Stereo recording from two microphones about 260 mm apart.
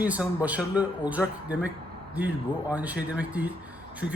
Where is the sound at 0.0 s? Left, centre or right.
Centre.